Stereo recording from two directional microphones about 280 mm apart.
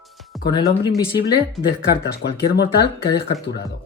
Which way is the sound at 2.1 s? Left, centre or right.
Left.